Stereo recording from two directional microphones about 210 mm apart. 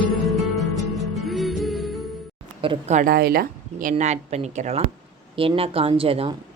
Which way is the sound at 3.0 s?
45° right (ahead or behind).